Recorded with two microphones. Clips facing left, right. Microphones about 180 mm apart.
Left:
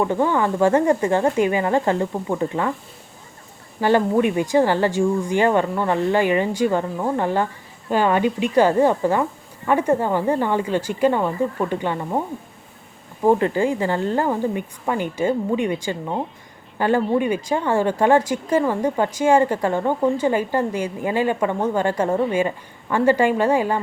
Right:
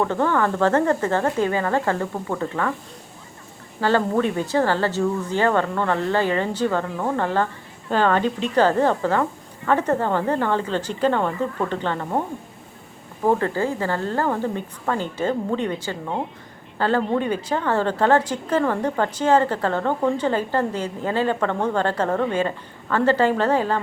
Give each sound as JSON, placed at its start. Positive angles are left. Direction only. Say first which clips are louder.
{"t": 0.0, "sound": "a woman's voice", "louder": "left 1 dB", "side_deg": 15}
{"t": 3.8, "sound": "a woman's voice", "louder": "left 3 dB", "side_deg": 15}
{"t": 13.2, "sound": "a woman's voice", "louder": "left 3 dB", "side_deg": 15}